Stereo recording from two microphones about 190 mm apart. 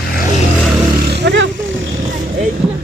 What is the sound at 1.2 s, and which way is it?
Roaring cats, 70° right (ahead or behind).